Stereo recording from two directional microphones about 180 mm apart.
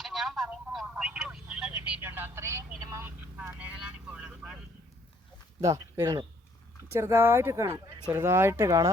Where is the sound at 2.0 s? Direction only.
10° right (ahead or behind).